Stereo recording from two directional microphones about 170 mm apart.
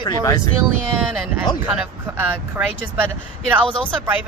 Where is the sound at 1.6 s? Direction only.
5° right (ahead or behind).